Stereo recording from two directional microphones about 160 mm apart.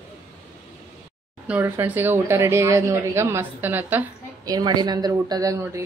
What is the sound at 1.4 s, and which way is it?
Speech, 10° right (ahead or behind).